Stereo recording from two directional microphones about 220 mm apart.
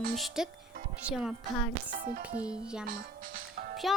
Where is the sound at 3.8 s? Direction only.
Centre (ahead or behind).